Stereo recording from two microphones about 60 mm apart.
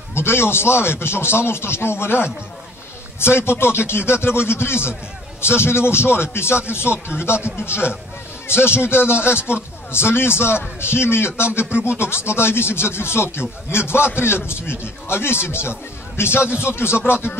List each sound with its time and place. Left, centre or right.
0.1 s a man's voice: left